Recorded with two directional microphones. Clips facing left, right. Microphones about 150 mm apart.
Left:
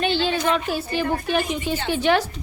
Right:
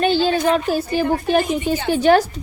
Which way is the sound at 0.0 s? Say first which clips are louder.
Right 5 dB; 40° right (ahead or behind).